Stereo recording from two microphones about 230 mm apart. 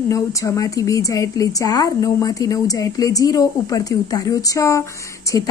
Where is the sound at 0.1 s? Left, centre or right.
Centre.